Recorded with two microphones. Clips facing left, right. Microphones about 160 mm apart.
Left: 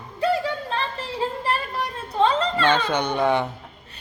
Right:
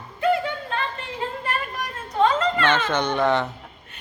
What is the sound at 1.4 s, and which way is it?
Children playing, 30° left (ahead or behind).